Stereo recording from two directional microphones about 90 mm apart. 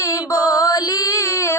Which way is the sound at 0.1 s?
40° left (ahead or behind).